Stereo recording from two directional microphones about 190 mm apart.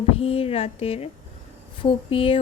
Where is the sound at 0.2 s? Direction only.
30° left (ahead or behind).